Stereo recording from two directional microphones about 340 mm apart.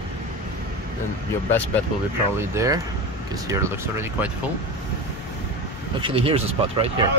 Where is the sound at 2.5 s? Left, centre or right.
Centre.